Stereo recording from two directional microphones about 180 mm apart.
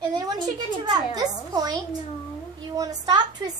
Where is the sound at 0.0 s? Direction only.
25° right (ahead or behind).